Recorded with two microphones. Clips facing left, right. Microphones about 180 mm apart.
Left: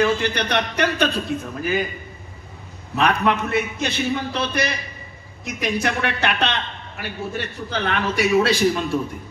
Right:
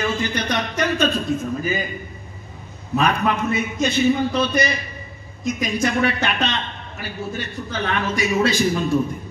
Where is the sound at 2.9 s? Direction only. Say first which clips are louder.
Even; 65° left (ahead or behind).